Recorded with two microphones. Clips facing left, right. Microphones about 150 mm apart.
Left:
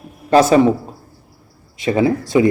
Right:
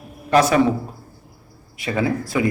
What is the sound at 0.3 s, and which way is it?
Speech, 30° left (ahead or behind).